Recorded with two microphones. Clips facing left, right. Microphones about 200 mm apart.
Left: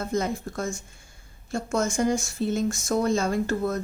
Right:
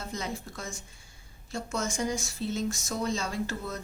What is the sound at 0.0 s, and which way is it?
A woman's voice, 50° left (ahead or behind).